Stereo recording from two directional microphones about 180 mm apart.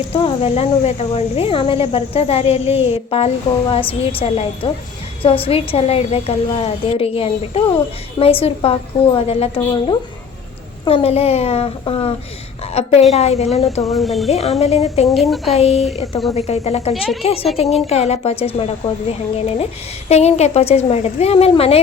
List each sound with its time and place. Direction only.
0.1 s speech: 30° left (ahead or behind)
13.9 s speech: centre (ahead or behind)
14.3 s speech: 35° left (ahead or behind)
15.0 s speech: centre (ahead or behind)
15.5 s speech: 35° left (ahead or behind)
20.1 s speech: 35° left (ahead or behind)